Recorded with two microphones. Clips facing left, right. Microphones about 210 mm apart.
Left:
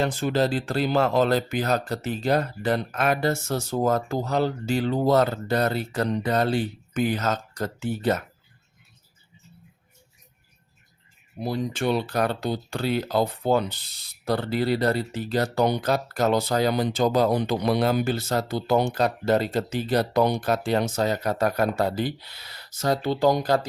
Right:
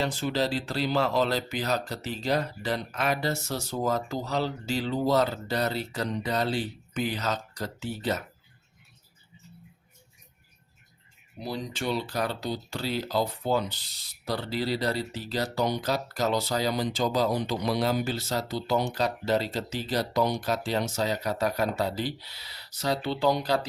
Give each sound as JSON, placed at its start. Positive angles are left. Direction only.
{"t": 0.0, "sound": "speech", "side_deg": 50}
{"t": 11.3, "sound": "speech", "side_deg": 55}